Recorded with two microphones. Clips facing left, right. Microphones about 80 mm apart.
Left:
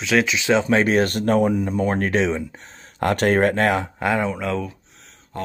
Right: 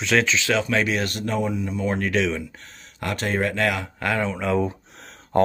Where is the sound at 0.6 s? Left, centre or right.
Left.